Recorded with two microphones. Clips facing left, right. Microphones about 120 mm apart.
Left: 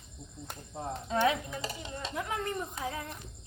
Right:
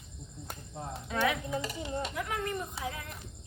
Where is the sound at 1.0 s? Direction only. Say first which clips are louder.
Left 2 dB; 25° left (ahead or behind).